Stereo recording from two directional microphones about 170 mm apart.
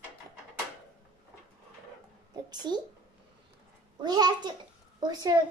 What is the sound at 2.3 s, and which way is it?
Speech, 25° right (ahead or behind).